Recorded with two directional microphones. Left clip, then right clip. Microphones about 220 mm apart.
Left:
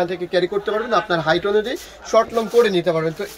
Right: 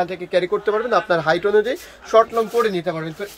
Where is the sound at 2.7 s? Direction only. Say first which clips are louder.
Left 5 dB; 5° left (ahead or behind).